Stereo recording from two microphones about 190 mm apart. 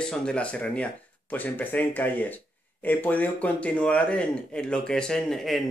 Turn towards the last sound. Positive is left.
turn(degrees=0)  # may be behind; listen again after turning